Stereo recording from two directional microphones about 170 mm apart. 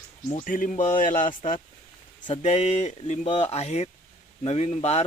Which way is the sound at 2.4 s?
40° left (ahead or behind).